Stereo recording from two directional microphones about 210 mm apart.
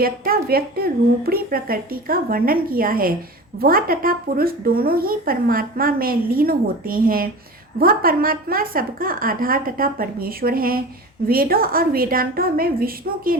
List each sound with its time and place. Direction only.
0.0 s speech: 45° right (ahead or behind)